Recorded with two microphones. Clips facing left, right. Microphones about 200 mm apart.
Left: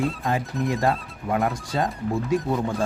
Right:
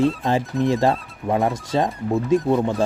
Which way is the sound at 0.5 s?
Centre (ahead or behind).